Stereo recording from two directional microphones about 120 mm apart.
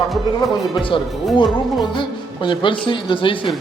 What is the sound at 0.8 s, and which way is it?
A woman's voice, 45° left (ahead or behind).